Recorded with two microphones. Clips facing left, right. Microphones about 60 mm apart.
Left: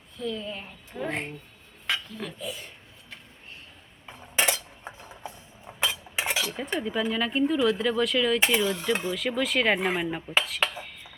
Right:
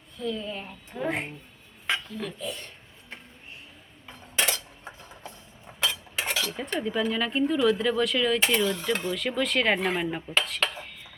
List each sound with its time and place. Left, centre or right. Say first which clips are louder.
0.2 s speech: right 1 dB; centre
4.0 s dishes: left 2 dB; centre
6.6 s speech: even; centre